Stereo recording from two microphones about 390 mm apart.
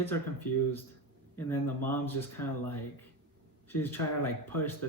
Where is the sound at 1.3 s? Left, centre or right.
Centre.